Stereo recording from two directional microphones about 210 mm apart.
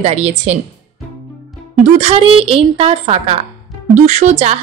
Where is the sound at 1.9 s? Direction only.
30° right (ahead or behind).